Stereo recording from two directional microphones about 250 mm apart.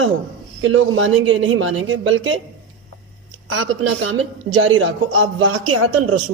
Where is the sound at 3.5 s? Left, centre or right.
Right.